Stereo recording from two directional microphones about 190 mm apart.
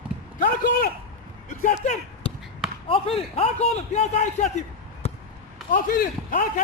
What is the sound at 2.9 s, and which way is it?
A man's voice, 30° left (ahead or behind).